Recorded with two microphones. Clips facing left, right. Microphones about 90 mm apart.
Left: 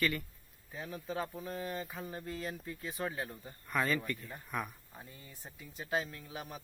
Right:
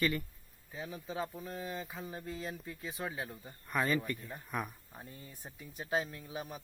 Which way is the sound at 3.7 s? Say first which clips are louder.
Right 1 dB; 20° right (ahead or behind).